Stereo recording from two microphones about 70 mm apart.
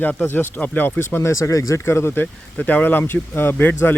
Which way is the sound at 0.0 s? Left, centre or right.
Left.